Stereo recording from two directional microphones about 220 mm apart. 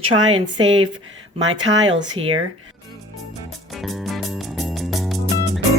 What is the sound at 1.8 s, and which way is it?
Speech, 20° right (ahead or behind).